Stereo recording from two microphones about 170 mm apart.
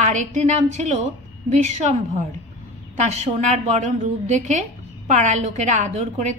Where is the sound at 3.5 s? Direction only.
40° right (ahead or behind).